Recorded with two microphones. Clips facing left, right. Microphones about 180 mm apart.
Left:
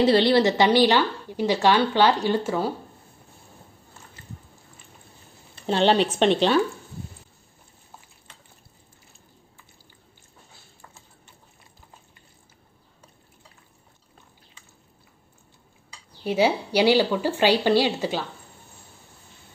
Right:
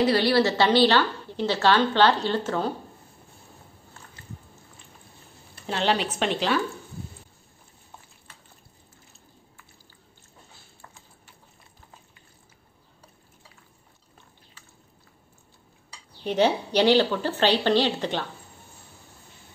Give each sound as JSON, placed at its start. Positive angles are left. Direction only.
{"t": 0.0, "sound": "a woman's voice", "side_deg": 25}
{"t": 5.7, "sound": "a woman's voice", "side_deg": 30}
{"t": 16.3, "sound": "a woman's voice", "side_deg": 10}